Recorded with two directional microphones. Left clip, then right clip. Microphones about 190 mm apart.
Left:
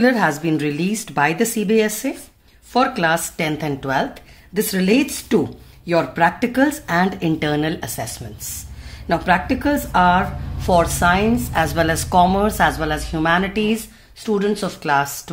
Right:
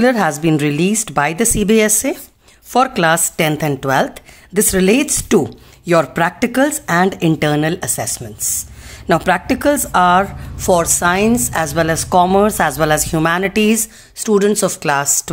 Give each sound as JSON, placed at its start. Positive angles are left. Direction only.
{"t": 0.0, "sound": "a woman's voice", "side_deg": -40}